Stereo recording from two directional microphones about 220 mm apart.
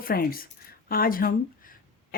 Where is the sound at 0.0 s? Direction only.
40° left (ahead or behind).